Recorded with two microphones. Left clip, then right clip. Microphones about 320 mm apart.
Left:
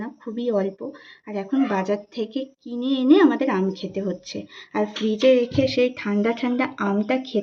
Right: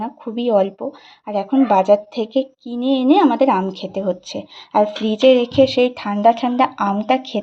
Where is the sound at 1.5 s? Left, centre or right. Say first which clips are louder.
Right 10 dB; centre.